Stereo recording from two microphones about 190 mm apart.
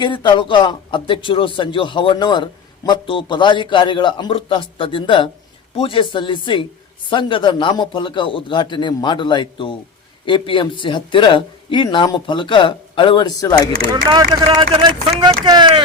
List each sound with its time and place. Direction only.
0.0 s a man's voice: 25° left (ahead or behind)
13.9 s speech: 20° right (ahead or behind)